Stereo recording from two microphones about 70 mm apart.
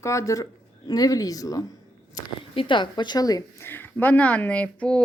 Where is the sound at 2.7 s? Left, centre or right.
Left.